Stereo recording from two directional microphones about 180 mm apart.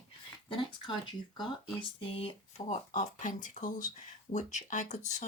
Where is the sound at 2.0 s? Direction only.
30° left (ahead or behind).